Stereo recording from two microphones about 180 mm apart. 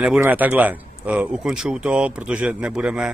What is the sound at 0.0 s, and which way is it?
Speech, 10° right (ahead or behind).